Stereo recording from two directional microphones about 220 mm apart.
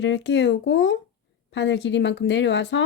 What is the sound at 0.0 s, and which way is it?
Speech, 50° left (ahead or behind).